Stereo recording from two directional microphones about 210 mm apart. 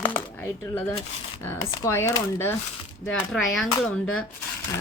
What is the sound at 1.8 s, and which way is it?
Speech, 15° left (ahead or behind).